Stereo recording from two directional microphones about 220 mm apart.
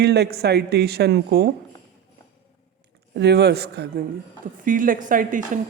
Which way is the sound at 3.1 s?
50° right (ahead or behind).